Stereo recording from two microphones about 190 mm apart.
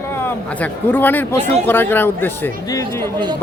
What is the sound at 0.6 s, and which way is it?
A man's voice, 10° left (ahead or behind).